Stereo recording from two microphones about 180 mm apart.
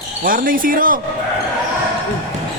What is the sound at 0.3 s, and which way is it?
Speech, 50° right (ahead or behind).